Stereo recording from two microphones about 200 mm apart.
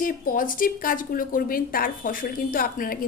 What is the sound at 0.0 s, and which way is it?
A woman's voice, 45° left (ahead or behind).